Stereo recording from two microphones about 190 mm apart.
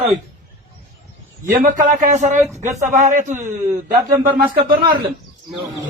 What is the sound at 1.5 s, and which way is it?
A man's voice, 45° right (ahead or behind).